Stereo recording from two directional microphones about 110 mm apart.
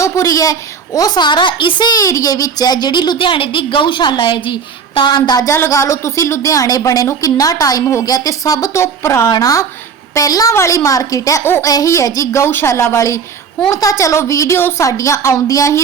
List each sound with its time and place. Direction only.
0.0 s a woman's voice: 30° left (ahead or behind)
5.5 s a woman's voice: 25° left (ahead or behind)